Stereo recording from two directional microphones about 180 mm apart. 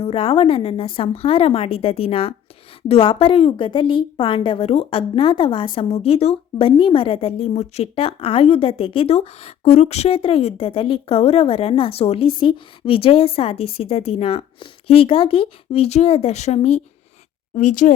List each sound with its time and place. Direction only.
0.0 s a woman's voice: 30° left (ahead or behind)